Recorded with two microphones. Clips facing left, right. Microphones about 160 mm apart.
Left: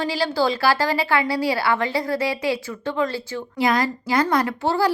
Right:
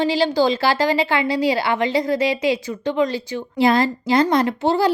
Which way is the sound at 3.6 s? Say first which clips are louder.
Right 4 dB; 25° right (ahead or behind).